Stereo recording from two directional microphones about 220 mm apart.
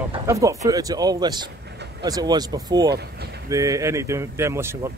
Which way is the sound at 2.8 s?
50° right (ahead or behind).